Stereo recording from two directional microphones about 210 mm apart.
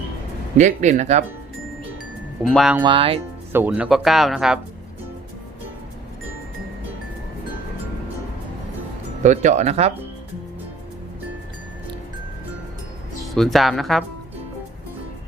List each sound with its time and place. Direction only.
0.5 s speech: 35° right (ahead or behind)
2.5 s speech: centre (ahead or behind)
2.8 s speech: 25° right (ahead or behind)
3.5 s speech: 10° right (ahead or behind)
9.2 s speech: 35° right (ahead or behind)
13.3 s speech: centre (ahead or behind)